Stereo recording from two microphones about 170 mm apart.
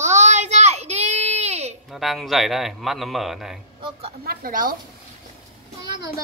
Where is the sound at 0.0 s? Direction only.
45° right (ahead or behind).